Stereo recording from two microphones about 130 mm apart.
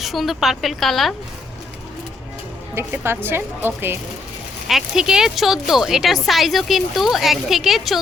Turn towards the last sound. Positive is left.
turn(degrees=0)  # may be behind; listen again after turning